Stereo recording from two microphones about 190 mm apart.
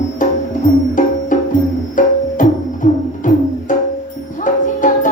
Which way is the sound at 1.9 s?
40° left (ahead or behind).